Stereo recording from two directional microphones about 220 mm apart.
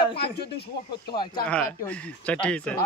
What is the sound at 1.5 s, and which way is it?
Speech, 5° left (ahead or behind).